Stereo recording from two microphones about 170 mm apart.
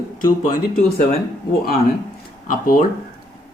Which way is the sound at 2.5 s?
50° left (ahead or behind).